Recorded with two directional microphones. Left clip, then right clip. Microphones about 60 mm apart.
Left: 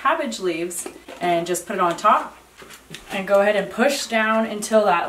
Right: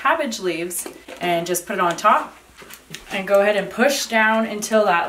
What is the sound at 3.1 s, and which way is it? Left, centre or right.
Speech, centre.